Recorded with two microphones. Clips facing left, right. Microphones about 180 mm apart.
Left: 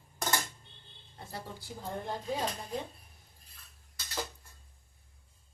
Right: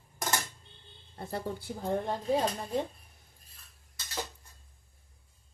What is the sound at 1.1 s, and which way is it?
Speech, 55° right (ahead or behind).